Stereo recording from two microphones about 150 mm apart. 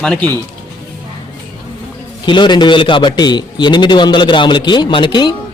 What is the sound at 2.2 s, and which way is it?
A man's voice, 30° left (ahead or behind).